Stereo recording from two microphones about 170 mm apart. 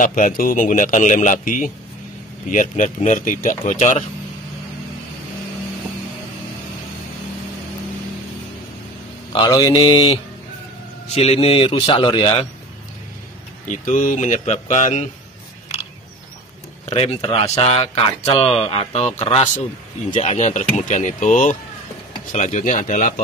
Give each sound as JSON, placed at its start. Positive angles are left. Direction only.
{"t": 0.0, "sound": "a man's voice", "side_deg": 50}
{"t": 9.3, "sound": "mantra", "side_deg": 25}
{"t": 11.1, "sound": "speech", "side_deg": 35}
{"t": 13.7, "sound": "a man's voice", "side_deg": 50}
{"t": 16.8, "sound": "a man's voice", "side_deg": 35}